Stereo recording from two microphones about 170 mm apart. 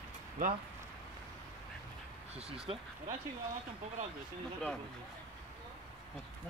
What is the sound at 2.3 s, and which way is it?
Speech, 35° right (ahead or behind).